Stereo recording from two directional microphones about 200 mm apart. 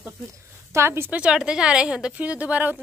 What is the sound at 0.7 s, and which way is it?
Speech, 10° right (ahead or behind).